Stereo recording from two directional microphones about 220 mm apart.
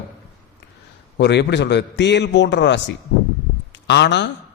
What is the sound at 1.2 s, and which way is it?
A man's voice, 50° left (ahead or behind).